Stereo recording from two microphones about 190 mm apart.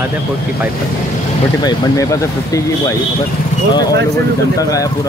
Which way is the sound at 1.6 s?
20° left (ahead or behind).